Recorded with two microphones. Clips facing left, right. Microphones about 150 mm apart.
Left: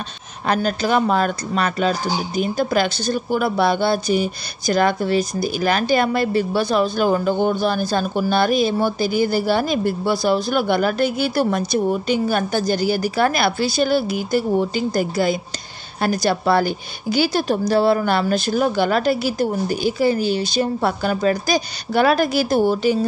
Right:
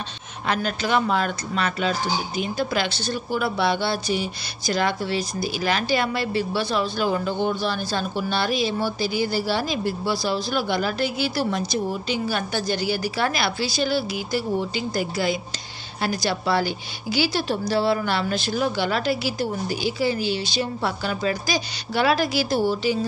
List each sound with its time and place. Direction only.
0.5 s speech: 40° left (ahead or behind)